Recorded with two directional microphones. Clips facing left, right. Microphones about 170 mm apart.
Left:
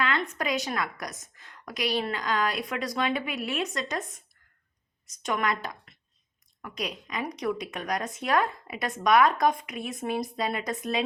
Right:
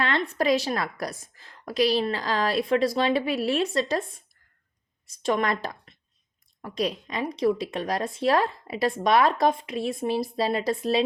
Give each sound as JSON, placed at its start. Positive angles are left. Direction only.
{"t": 0.0, "sound": "speech", "side_deg": -35}